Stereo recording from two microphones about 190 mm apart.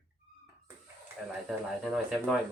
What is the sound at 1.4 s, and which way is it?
Speech, centre (ahead or behind).